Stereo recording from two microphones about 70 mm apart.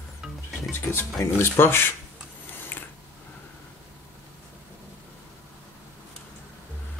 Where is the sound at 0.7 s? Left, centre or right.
Left.